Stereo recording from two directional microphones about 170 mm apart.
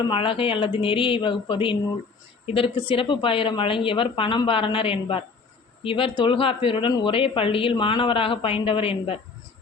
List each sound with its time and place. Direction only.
0.0 s speech: 30° left (ahead or behind)